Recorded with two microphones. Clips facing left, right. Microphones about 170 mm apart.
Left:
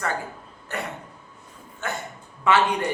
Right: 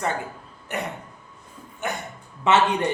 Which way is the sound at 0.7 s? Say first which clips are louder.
Right 2 dB; 20° right (ahead or behind).